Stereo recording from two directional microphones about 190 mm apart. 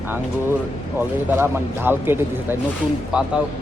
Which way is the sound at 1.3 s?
10° right (ahead or behind).